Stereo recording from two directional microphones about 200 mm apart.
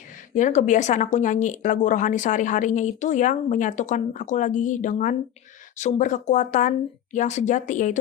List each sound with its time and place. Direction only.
0.3 s speech: 40° left (ahead or behind)